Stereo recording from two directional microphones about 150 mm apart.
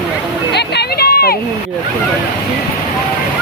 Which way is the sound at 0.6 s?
90° left.